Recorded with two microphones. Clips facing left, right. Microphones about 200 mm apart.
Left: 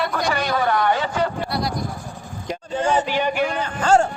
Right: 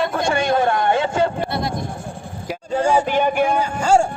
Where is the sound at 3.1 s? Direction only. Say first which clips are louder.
Right 4 dB; 50° right (ahead or behind).